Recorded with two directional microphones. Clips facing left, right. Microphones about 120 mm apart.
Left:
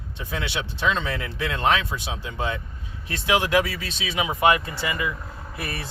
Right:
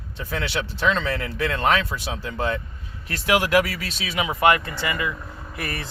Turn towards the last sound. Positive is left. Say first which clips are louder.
# right 1 dB
turn(degrees=15)  # may be behind; listen again after turning